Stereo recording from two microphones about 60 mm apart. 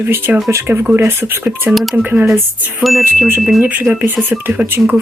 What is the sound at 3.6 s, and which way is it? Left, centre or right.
Speech, right.